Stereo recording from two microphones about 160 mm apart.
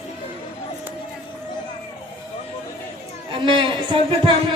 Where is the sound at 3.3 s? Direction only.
30° right (ahead or behind).